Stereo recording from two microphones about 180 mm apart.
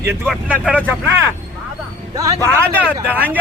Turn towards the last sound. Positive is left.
turn(degrees=-10)  # may be behind; listen again after turning